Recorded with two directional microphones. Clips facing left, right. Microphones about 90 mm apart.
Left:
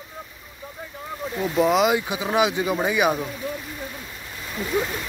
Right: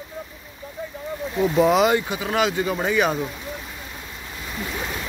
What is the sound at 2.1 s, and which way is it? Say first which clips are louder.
Speech: left 1 dB; 15° left (ahead or behind).